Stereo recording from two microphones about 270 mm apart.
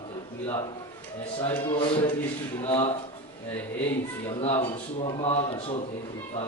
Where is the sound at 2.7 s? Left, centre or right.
Centre.